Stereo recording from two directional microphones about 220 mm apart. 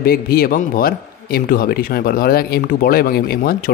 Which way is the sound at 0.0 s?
45° left (ahead or behind).